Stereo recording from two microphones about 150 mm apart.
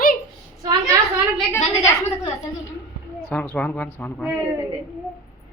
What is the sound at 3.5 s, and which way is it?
Speech, 10° left (ahead or behind).